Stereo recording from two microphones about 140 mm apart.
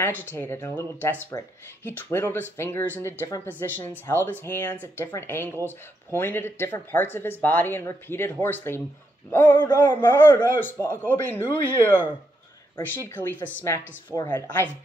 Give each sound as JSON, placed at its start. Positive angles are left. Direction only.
{"t": 0.0, "sound": "speech", "side_deg": 15}
{"t": 9.6, "sound": "speech", "side_deg": 30}
{"t": 9.9, "sound": "speech", "side_deg": 15}